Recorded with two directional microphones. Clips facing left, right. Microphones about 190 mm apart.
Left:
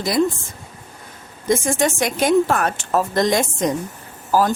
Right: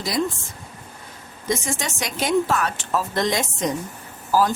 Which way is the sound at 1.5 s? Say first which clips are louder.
Left 7 dB; 50° left (ahead or behind).